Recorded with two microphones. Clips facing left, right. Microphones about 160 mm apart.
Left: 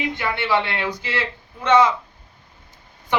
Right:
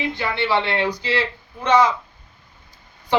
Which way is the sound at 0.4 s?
15° right (ahead or behind).